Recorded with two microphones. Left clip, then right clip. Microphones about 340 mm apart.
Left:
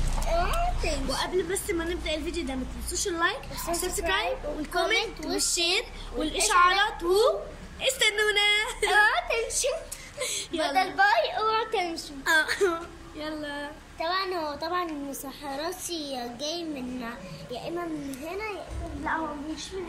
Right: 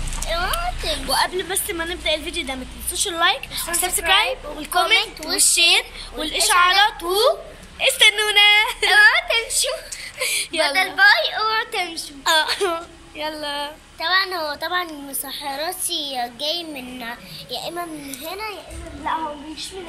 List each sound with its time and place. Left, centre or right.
0.3 s a sound: centre
1.2 s a woman's voice: centre
2.9 s a woman's voice: right
3.2 s a woman's voice: centre
12.3 s a woman's voice: centre